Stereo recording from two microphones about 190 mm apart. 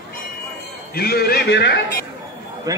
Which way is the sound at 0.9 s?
55° left (ahead or behind).